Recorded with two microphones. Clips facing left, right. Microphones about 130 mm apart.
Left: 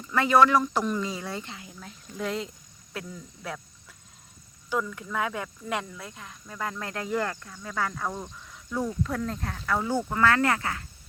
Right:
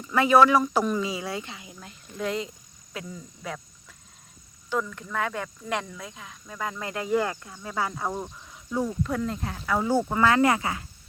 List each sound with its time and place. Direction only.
0.1 s speech: 10° right (ahead or behind)
4.7 s speech: 5° left (ahead or behind); by 10.8 s 15° right (ahead or behind)